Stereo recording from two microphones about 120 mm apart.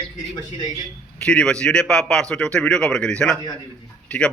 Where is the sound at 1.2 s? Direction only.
5° left (ahead or behind).